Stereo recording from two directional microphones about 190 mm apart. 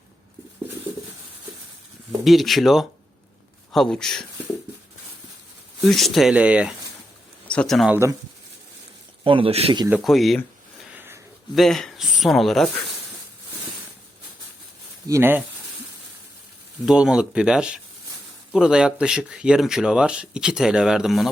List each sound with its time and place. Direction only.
2.2 s speech: centre (ahead or behind)
5.9 s speech: centre (ahead or behind)
7.4 s speech: 5° left (ahead or behind)
9.2 s speech: 30° right (ahead or behind)
10.0 s speech: centre (ahead or behind)
11.5 s speech: centre (ahead or behind)
15.0 s speech: 15° right (ahead or behind)
16.8 s speech: 5° right (ahead or behind)